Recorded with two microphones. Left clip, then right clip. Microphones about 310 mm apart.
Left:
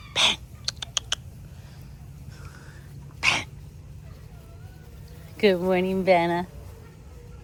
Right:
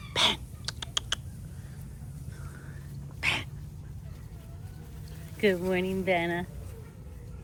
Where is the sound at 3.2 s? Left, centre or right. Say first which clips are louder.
Left 6 dB; centre.